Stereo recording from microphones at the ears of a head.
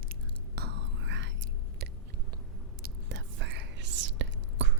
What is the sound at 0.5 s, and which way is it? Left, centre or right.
Whispering, right.